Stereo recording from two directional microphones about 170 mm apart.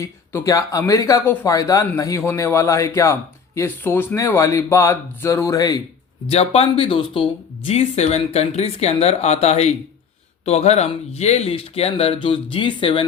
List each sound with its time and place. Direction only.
0.0 s speech: 15° left (ahead or behind)
6.2 s speech: 35° left (ahead or behind)